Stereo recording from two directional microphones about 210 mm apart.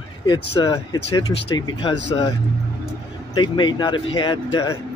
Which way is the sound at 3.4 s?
20° left (ahead or behind).